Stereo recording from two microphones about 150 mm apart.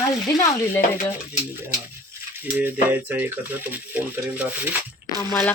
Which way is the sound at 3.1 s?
10° right (ahead or behind).